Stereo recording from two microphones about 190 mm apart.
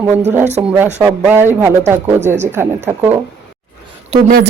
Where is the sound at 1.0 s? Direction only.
10° right (ahead or behind).